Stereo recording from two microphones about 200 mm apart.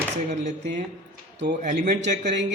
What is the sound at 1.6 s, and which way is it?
Speech, 35° right (ahead or behind).